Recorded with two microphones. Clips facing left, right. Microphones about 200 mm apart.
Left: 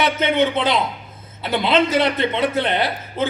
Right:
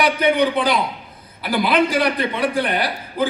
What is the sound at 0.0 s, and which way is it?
A man's voice, 25° left (ahead or behind).